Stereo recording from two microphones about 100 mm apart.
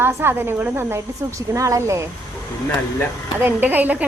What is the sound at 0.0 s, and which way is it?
A woman's voice, 25° right (ahead or behind).